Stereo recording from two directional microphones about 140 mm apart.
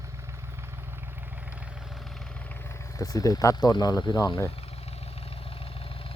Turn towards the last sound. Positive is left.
turn(degrees=25)  # may be behind; listen again after turning